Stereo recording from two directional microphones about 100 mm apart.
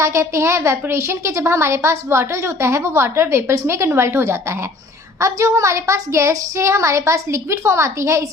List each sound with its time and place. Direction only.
0.0 s a woman's voice: 30° right (ahead or behind)